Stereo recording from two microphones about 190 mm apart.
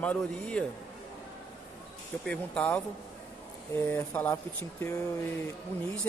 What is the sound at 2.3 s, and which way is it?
Speech, 5° left (ahead or behind).